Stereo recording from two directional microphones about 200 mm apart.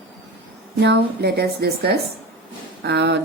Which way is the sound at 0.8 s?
55° right (ahead or behind).